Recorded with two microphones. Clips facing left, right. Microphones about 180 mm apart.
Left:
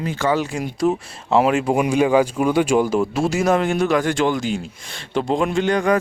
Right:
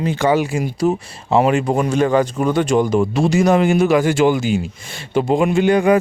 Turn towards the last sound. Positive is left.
turn(degrees=-10)  # may be behind; listen again after turning